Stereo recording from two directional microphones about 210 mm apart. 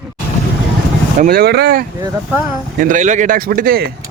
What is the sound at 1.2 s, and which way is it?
A man's voice, 45° right (ahead or behind).